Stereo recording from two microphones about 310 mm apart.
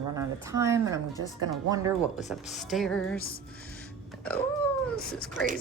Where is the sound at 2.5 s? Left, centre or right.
Centre.